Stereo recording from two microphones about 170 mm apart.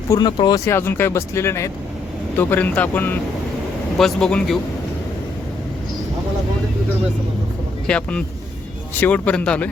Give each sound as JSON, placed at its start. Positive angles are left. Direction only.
{"t": 0.1, "sound": "speech", "side_deg": 25}
{"t": 7.9, "sound": "speech", "side_deg": 5}